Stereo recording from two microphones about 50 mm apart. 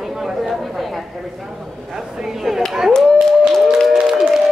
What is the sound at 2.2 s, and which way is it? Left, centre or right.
Speech, centre.